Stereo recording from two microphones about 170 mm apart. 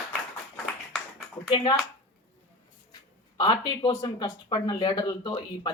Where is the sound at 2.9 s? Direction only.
25° left (ahead or behind).